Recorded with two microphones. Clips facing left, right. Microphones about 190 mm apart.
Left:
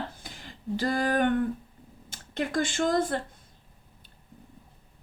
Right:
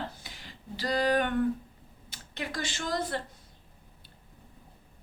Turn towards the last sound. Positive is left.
turn(degrees=50)  # may be behind; listen again after turning